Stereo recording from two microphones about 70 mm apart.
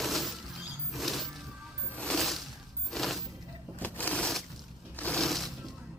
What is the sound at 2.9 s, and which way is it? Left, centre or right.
Music, centre.